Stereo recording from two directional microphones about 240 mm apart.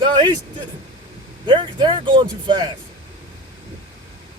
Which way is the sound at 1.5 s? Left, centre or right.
Centre.